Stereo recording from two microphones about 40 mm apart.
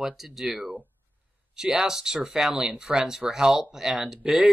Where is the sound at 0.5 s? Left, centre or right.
Right.